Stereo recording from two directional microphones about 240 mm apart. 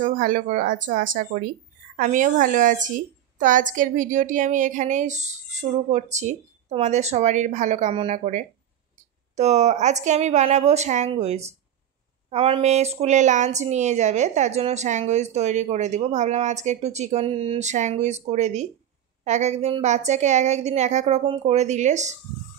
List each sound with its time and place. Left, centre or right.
0.0 s a woman's voice: right